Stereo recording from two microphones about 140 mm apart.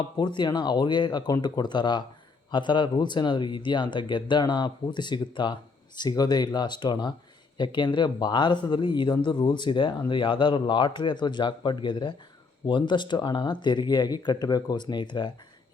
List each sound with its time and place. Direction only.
0.2 s speech: 30° left (ahead or behind)